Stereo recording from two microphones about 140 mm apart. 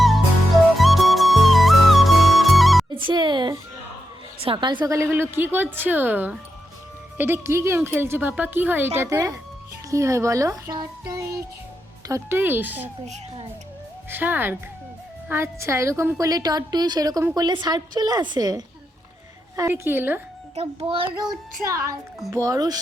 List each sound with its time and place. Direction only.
0.0 s music: centre (ahead or behind)
3.1 s music: 35° right (ahead or behind)
4.4 s a woman's voice: 35° right (ahead or behind)
5.3 s a woman's voice: 15° right (ahead or behind)
14.1 s a woman's voice: 15° right (ahead or behind)
19.5 s a woman's voice: 20° right (ahead or behind)
20.6 s speech: 45° right (ahead or behind)
22.3 s a woman's voice: 25° right (ahead or behind)